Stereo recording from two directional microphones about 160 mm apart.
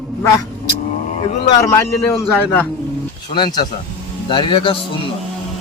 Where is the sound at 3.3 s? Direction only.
25° left (ahead or behind).